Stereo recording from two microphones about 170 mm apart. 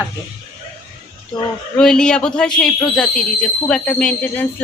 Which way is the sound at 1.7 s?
5° left (ahead or behind).